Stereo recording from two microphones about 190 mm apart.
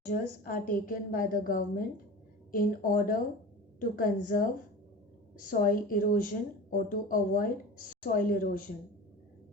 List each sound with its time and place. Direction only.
0.1 s a woman's voice: 45° left (ahead or behind)
5.5 s a woman's voice: 45° left (ahead or behind)